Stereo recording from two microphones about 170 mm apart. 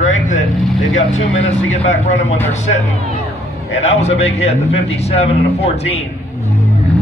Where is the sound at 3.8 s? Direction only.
40° left (ahead or behind).